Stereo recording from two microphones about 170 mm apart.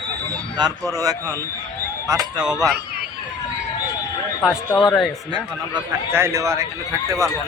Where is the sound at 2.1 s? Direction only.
5° right (ahead or behind).